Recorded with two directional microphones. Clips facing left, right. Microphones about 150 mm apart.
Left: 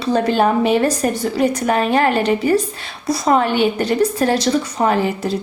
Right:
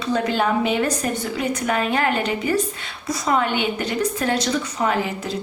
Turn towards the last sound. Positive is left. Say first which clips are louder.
# left 5 dB
turn(degrees=35)  # may be behind; listen again after turning